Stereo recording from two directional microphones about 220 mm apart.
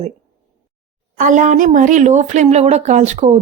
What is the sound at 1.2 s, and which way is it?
Speech, 35° right (ahead or behind).